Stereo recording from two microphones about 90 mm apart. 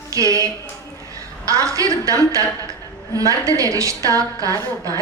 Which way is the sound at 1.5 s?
35° right (ahead or behind).